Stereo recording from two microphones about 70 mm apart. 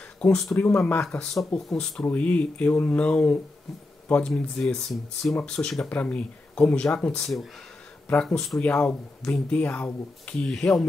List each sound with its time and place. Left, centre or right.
0.2 s speech: centre
0.6 s speech: left
4.4 s speech: centre
7.2 s speech: centre
8.1 s speech: centre